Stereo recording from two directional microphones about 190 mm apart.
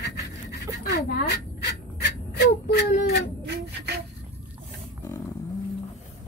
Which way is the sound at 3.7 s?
60° right (ahead or behind).